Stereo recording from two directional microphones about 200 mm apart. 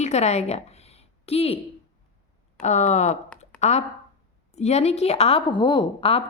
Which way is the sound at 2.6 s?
35° left (ahead or behind).